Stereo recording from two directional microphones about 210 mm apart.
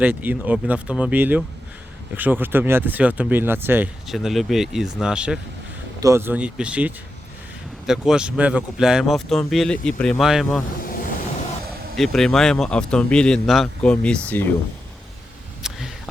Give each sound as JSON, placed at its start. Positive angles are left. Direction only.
{"t": 0.0, "sound": "speech", "side_deg": -10}
{"t": 11.9, "sound": "speech", "side_deg": 0}
{"t": 15.6, "sound": "a sound", "side_deg": 0}